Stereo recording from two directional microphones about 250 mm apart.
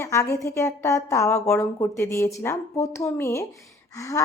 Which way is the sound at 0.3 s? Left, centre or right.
Centre.